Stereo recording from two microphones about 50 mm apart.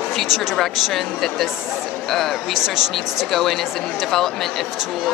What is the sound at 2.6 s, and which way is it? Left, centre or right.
Speech, centre.